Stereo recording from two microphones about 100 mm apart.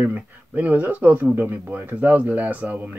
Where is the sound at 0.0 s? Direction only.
15° right (ahead or behind).